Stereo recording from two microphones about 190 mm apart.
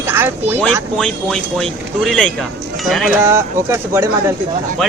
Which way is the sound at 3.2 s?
15° right (ahead or behind).